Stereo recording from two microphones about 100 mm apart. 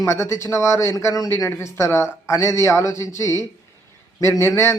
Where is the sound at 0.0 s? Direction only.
25° left (ahead or behind).